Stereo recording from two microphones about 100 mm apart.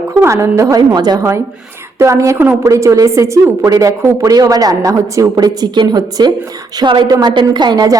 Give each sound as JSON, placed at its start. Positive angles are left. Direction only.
{"t": 0.2, "sound": "speech", "side_deg": -25}
{"t": 0.9, "sound": "a woman's voice", "side_deg": -40}
{"t": 2.0, "sound": "a woman's voice", "side_deg": -30}